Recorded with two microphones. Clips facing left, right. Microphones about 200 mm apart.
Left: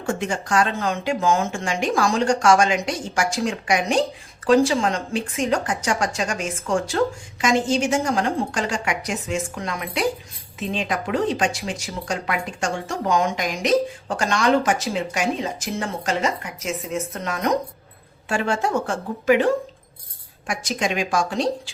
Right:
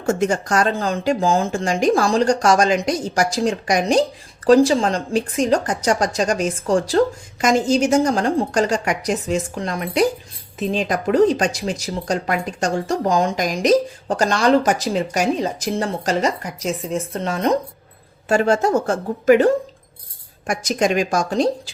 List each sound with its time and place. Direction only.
0.0 s speech: 40° right (ahead or behind)
18.3 s speech: 40° right (ahead or behind)
20.5 s a woman's voice: 45° right (ahead or behind)